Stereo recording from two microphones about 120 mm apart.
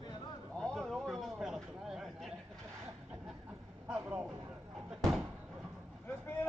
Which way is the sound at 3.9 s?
10° right (ahead or behind).